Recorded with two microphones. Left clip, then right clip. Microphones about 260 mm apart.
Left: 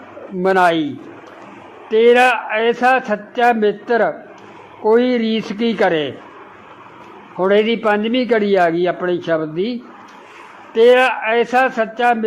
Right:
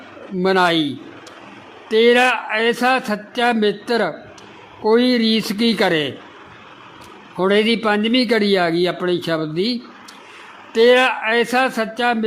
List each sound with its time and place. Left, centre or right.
0.4 s a man's voice: right
1.9 s a man's voice: right
7.3 s a man's voice: right
10.8 s a man's voice: right